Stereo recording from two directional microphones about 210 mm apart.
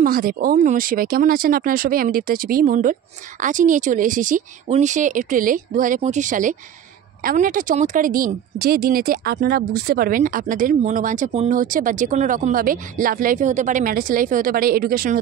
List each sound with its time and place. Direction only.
0.0 s speech: 45° right (ahead or behind)